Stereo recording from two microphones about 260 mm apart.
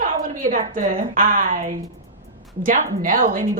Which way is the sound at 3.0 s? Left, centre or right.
Right.